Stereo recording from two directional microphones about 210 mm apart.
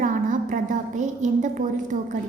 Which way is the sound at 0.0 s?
40° right (ahead or behind).